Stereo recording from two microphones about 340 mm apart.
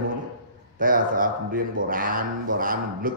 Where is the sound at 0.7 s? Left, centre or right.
Right.